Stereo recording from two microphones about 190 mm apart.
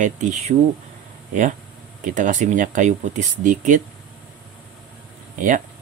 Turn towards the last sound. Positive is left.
turn(degrees=-40)  # may be behind; listen again after turning